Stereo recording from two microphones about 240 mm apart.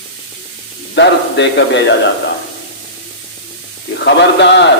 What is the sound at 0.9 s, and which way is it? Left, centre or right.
A man's voice, left.